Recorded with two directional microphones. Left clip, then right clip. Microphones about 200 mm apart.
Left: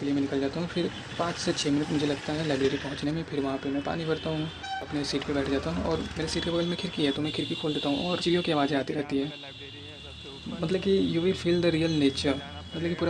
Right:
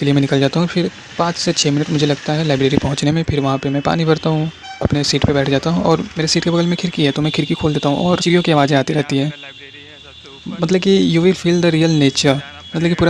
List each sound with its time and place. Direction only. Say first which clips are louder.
0.0 s speech: right 13 dB; 55° right (ahead or behind)
10.6 s speech: right 12 dB; 50° right (ahead or behind)